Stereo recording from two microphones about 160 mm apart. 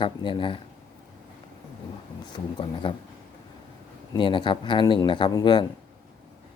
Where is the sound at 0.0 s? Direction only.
30° left (ahead or behind).